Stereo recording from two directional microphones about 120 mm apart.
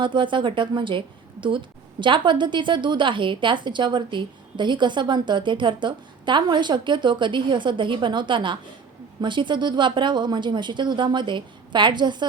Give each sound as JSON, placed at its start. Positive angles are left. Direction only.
{"t": 0.0, "sound": "a woman's voice", "side_deg": -45}